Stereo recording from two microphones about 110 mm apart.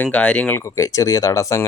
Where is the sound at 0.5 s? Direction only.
25° left (ahead or behind).